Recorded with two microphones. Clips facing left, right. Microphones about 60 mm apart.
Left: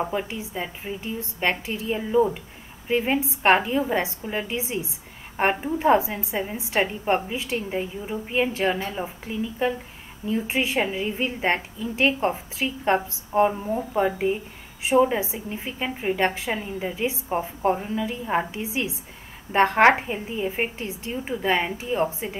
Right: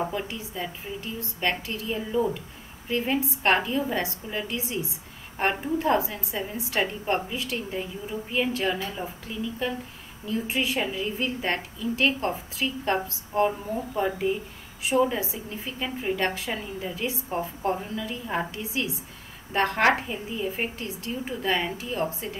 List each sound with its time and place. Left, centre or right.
0.0 s a woman's voice: left